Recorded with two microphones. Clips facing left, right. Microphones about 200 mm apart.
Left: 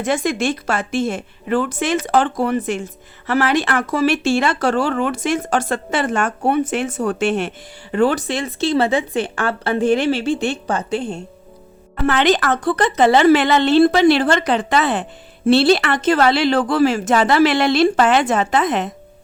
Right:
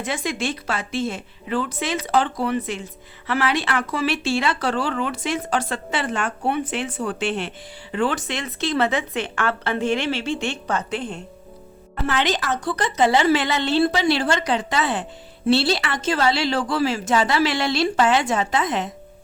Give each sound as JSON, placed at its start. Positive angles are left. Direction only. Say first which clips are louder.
{"t": 0.0, "sound": "speech", "louder": "left 7 dB", "side_deg": 45}
{"t": 12.0, "sound": "speech", "louder": "left 7 dB", "side_deg": 60}